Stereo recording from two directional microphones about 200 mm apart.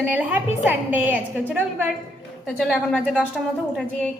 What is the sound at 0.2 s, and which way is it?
A woman's voice, 10° right (ahead or behind).